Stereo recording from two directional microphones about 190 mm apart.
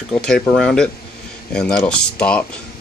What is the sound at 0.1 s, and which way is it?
Speech, 5° left (ahead or behind).